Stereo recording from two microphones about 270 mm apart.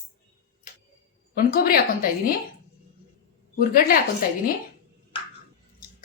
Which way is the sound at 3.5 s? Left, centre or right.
Left.